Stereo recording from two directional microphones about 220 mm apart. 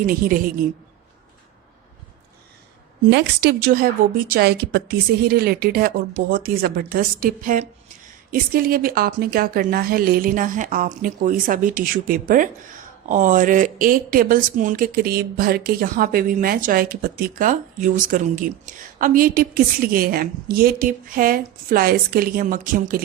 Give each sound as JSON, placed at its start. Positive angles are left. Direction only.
{"t": 0.0, "sound": "speech", "side_deg": -40}
{"t": 3.1, "sound": "a woman's voice", "side_deg": -45}